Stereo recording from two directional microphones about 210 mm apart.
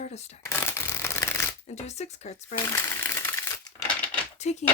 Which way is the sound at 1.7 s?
30° left (ahead or behind).